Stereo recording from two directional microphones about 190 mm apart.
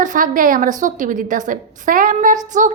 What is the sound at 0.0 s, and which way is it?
A woman's voice, 45° right (ahead or behind).